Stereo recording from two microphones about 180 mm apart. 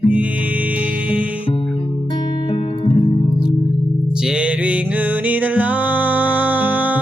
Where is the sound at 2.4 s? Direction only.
25° left (ahead or behind).